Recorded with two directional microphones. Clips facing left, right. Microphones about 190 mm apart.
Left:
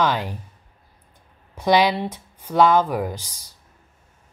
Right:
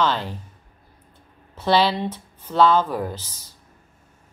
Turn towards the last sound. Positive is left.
turn(degrees=15)  # may be behind; listen again after turning